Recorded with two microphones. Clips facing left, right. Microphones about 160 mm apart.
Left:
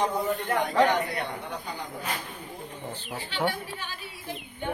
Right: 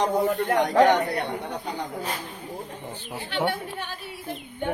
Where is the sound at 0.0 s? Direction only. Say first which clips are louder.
Right 4 dB; 70° right (ahead or behind).